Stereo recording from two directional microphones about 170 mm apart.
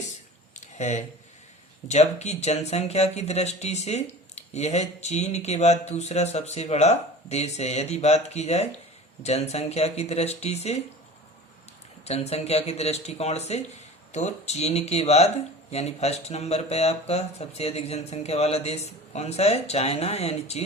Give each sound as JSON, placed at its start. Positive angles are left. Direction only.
{"t": 0.5, "sound": "a sound", "side_deg": 45}
{"t": 1.9, "sound": "speech", "side_deg": 40}
{"t": 12.0, "sound": "speech", "side_deg": 40}